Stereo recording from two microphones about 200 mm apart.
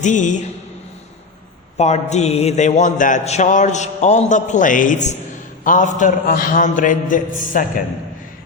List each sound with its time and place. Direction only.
0.0 s a man's voice: 40° left (ahead or behind)
1.8 s a man's voice: 35° left (ahead or behind)